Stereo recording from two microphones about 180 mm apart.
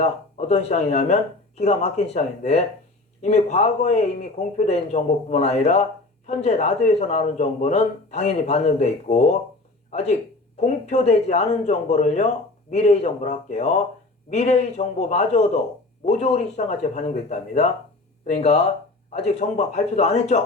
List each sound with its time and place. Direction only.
0.0 s speech: 40° left (ahead or behind)